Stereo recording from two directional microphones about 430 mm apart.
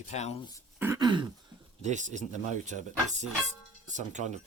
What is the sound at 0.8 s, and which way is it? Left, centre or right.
Throat clearing, centre.